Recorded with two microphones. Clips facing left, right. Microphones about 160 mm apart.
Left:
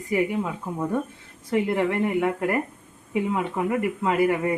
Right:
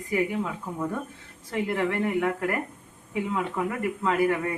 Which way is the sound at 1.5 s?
20° left (ahead or behind).